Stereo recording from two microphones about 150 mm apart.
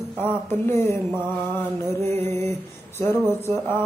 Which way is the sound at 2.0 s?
15° left (ahead or behind).